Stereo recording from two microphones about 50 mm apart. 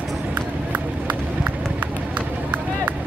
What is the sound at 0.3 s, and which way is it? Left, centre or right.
Run, right.